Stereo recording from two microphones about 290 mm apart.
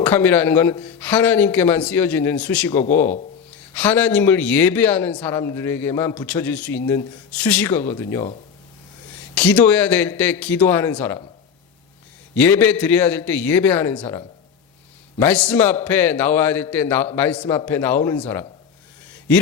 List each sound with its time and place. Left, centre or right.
0.0 s a man's voice: centre
9.3 s a man's voice: centre
12.3 s a man's voice: centre
15.2 s a man's voice: centre
17.3 s a man's voice: centre